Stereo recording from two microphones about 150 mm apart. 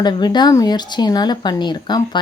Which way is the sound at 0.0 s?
30° left (ahead or behind).